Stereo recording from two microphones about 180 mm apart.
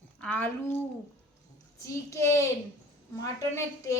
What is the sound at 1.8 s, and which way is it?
A woman's voice, 15° left (ahead or behind).